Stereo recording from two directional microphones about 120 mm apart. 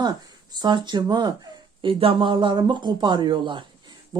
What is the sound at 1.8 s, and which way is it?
Speech, 50° right (ahead or behind).